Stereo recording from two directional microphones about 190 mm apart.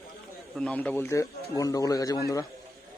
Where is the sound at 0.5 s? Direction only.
5° left (ahead or behind).